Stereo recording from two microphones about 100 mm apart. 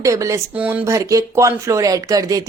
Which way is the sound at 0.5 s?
15° right (ahead or behind).